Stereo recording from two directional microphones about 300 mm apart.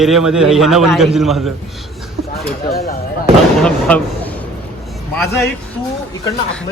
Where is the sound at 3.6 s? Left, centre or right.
Centre.